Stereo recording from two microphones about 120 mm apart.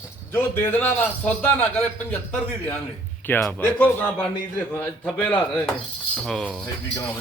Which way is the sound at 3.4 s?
10° left (ahead or behind).